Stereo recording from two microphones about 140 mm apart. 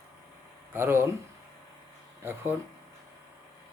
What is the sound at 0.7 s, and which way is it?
Speech, 15° right (ahead or behind).